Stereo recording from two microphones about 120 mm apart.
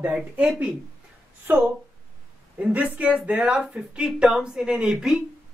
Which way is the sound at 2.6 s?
10° right (ahead or behind).